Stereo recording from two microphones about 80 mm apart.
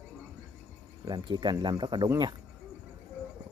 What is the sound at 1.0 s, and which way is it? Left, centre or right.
Speech, right.